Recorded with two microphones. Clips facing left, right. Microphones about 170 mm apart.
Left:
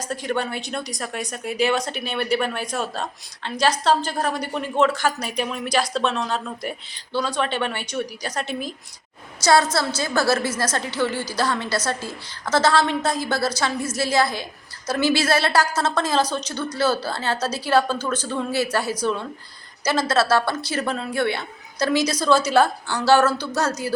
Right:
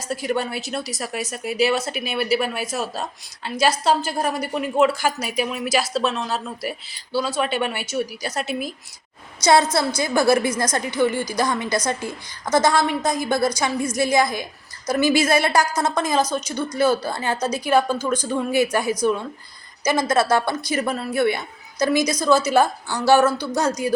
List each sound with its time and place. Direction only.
0.1 s a woman's voice: 5° right (ahead or behind)
9.4 s a woman's voice: 20° right (ahead or behind)